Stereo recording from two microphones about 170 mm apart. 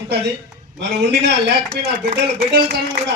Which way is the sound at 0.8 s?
90° right.